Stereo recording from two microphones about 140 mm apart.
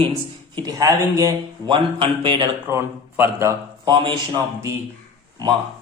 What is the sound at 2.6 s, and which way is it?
Speech, 15° right (ahead or behind).